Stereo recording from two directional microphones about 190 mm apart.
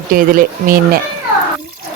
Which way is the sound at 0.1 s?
50° right (ahead or behind).